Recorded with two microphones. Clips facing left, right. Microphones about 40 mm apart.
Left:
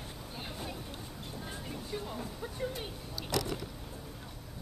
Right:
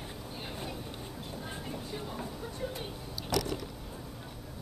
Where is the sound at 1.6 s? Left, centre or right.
Centre.